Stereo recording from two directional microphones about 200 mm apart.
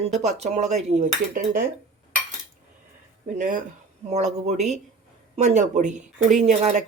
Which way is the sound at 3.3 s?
40° right (ahead or behind).